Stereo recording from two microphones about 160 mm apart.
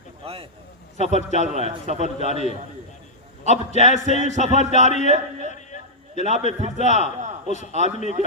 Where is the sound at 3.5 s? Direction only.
45° left (ahead or behind).